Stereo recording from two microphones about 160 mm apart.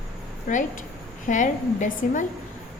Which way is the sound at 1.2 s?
50° left (ahead or behind).